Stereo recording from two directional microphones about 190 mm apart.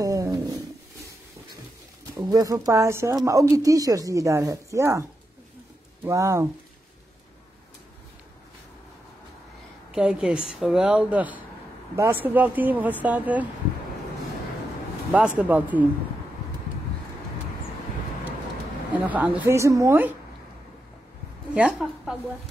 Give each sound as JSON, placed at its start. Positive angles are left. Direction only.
{"t": 0.0, "sound": "a sound", "side_deg": -15}
{"t": 2.1, "sound": "speech", "side_deg": -20}
{"t": 6.0, "sound": "speech", "side_deg": -15}
{"t": 9.9, "sound": "a woman's voice", "side_deg": -5}
{"t": 15.1, "sound": "speech", "side_deg": -10}
{"t": 19.0, "sound": "speech", "side_deg": -10}
{"t": 21.5, "sound": "a woman's voice", "side_deg": -5}